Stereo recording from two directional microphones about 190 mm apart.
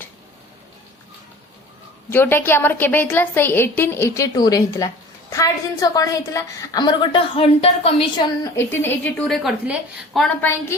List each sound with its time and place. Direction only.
2.0 s a woman's voice: 10° left (ahead or behind); by 8.0 s 30° left (ahead or behind)
8.5 s a woman's voice: 10° left (ahead or behind)